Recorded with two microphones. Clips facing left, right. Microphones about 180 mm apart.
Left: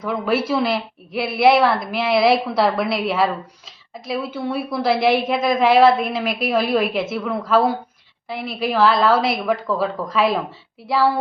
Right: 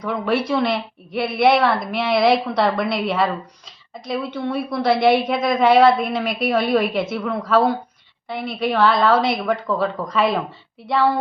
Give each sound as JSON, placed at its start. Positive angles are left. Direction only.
{"t": 0.0, "sound": "a woman's voice", "side_deg": 5}